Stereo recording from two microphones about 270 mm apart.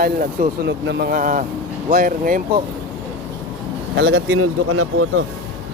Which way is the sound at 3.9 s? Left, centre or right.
Right.